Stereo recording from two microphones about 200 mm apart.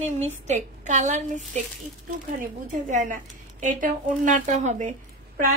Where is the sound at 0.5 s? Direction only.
35° right (ahead or behind).